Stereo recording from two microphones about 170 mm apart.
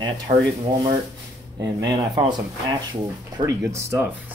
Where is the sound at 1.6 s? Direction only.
25° right (ahead or behind).